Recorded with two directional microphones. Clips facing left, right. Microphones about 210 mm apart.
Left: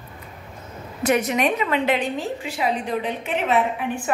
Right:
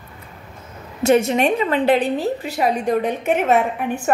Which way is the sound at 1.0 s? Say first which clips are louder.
Right 5 dB; 25° right (ahead or behind).